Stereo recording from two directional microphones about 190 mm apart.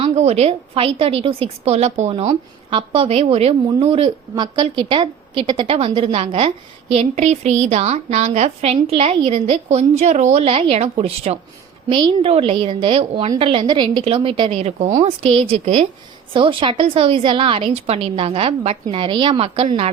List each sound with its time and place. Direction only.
0.0 s a woman's voice: 35° right (ahead or behind)